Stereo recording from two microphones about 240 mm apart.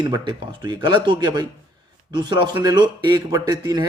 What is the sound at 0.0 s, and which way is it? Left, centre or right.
A man's voice, centre.